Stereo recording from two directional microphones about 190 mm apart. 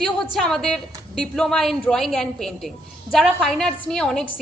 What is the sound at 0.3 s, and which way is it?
A woman's voice, centre (ahead or behind).